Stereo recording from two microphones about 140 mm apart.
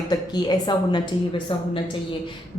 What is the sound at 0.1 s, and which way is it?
Speech, 30° left (ahead or behind).